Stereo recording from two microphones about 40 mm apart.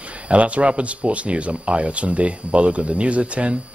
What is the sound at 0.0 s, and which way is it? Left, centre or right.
Speech, right.